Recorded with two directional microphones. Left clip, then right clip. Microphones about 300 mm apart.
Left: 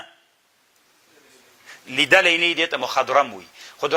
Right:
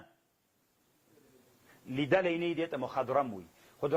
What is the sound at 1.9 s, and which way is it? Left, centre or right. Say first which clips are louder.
Speech: left 14 dB; centre.